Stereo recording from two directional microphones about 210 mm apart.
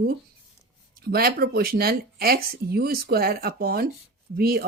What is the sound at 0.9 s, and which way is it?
A woman's voice, 45° right (ahead or behind).